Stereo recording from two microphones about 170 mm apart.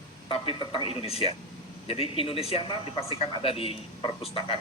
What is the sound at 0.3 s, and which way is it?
A man's voice, 30° left (ahead or behind).